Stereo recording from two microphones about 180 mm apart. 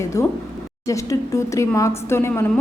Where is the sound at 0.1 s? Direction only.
15° left (ahead or behind).